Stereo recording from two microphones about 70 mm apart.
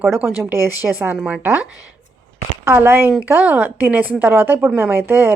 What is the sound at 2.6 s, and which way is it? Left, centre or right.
A woman's voice, right.